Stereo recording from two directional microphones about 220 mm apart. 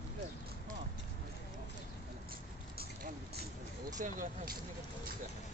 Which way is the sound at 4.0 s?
35° right (ahead or behind).